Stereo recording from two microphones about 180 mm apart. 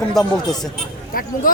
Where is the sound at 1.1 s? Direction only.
50° left (ahead or behind).